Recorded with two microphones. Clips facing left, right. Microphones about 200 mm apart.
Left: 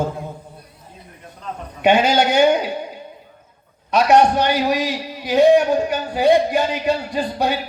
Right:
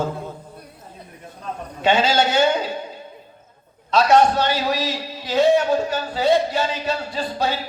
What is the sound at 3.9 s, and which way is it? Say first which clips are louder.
A man's voice: left 1 dB; 15° left (ahead or behind).